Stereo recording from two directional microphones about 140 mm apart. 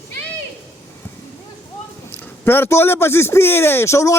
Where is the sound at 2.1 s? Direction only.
15° left (ahead or behind).